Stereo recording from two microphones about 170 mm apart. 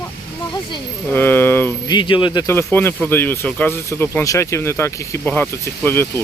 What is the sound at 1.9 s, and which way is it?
Speech, 30° left (ahead or behind).